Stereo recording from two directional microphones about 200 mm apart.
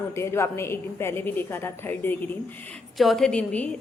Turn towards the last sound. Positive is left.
turn(degrees=5)  # may be behind; listen again after turning